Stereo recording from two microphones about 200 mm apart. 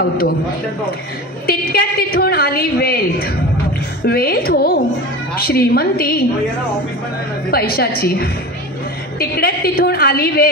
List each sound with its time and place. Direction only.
1.4 s a sound: 50° left (ahead or behind)
4.0 s a woman's voice: 50° left (ahead or behind)
7.5 s a woman's voice: 50° left (ahead or behind)